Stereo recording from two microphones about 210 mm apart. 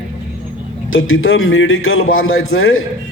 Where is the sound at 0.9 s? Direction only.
70° left (ahead or behind).